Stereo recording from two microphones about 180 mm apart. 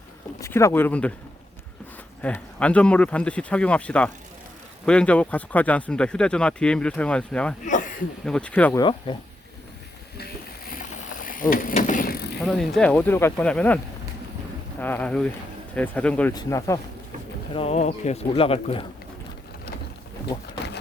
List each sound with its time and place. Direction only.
0.3 s speech: 15° left (ahead or behind)
2.2 s speech: 5° left (ahead or behind)
7.6 s a sound: 45° left (ahead or behind)
8.2 s speech: 5° left (ahead or behind)
8.7 s speech: 25° left (ahead or behind)
11.3 s mechanisms: 50° left (ahead or behind)
12.5 s speech: centre (ahead or behind)
14.8 s speech: 10° left (ahead or behind)
16.3 s speech: 20° left (ahead or behind)
17.5 s speech: 35° left (ahead or behind)